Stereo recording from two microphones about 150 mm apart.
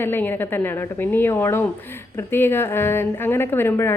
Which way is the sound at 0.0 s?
15° left (ahead or behind).